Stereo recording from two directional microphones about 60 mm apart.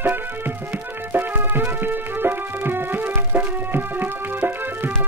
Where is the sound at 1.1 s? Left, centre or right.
Right.